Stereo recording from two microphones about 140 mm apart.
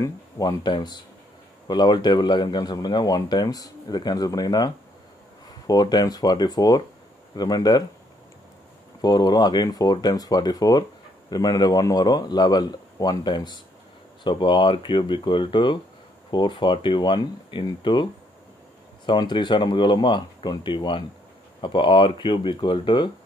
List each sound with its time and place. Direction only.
0.0 s speech: 25° left (ahead or behind)
9.0 s speech: 30° left (ahead or behind)
19.0 s speech: 35° left (ahead or behind)